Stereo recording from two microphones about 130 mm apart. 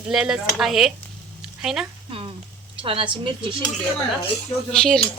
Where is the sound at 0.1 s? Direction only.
5° right (ahead or behind).